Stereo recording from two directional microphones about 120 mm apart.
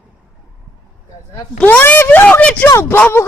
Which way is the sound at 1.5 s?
15° left (ahead or behind).